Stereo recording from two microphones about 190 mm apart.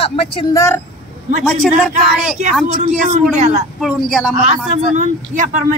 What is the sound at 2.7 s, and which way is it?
Speech, 35° right (ahead or behind).